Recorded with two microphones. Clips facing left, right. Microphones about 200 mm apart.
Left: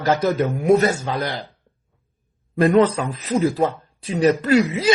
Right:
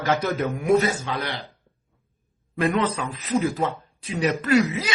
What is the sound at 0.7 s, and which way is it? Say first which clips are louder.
Speech: left 3 dB; 50° left (ahead or behind).